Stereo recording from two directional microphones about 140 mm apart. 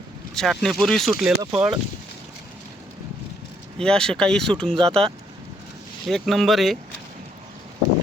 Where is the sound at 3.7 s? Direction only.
5° left (ahead or behind).